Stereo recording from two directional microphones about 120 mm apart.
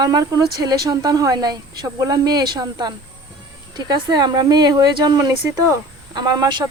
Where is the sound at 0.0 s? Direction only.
30° right (ahead or behind).